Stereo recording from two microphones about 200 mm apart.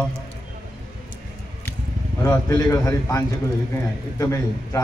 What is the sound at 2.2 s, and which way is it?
A man's voice, 15° left (ahead or behind).